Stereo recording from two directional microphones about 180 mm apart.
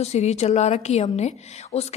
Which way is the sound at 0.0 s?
40° left (ahead or behind).